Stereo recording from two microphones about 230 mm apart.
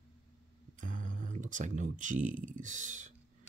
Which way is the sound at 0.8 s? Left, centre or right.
Right.